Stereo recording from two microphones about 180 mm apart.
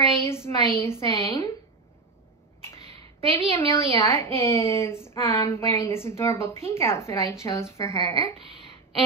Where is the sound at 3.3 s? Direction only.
15° left (ahead or behind).